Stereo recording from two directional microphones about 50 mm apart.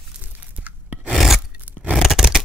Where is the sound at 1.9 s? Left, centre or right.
Centre.